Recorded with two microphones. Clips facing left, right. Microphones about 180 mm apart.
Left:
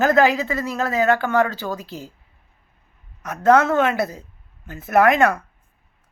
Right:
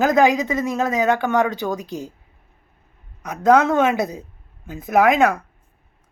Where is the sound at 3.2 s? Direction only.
15° right (ahead or behind).